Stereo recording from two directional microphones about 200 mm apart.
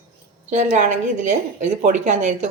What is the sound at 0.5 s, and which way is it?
Speech, 35° right (ahead or behind).